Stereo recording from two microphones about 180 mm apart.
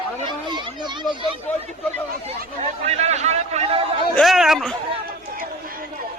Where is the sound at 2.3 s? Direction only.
35° right (ahead or behind).